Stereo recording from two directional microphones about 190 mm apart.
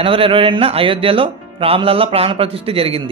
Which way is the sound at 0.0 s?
30° right (ahead or behind).